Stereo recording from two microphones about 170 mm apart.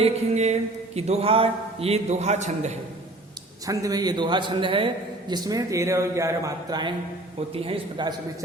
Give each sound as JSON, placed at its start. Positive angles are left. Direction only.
{"t": 0.0, "sound": "a man's voice", "side_deg": -40}
{"t": 3.7, "sound": "a man's voice", "side_deg": -20}